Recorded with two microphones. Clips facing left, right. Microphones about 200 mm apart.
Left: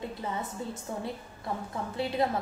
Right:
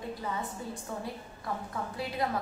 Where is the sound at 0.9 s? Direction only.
25° left (ahead or behind).